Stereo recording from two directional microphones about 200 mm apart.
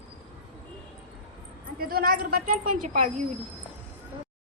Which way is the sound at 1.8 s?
50° right (ahead or behind).